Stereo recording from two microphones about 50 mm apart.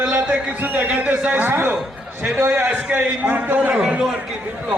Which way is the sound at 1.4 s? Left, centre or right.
Right.